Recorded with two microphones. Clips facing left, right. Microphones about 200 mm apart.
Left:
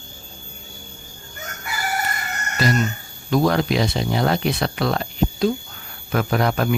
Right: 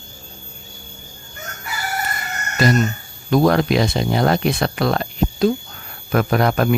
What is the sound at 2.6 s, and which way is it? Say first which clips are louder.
Speech: right 4 dB; 50° right (ahead or behind).